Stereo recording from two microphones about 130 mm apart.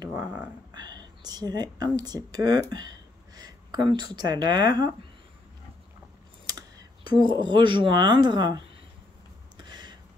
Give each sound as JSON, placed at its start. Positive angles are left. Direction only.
{"t": 0.1, "sound": "dog", "side_deg": -15}
{"t": 0.7, "sound": "a woman's voice", "side_deg": -30}
{"t": 6.4, "sound": "speech", "side_deg": -30}
{"t": 9.6, "sound": "a sound", "side_deg": -35}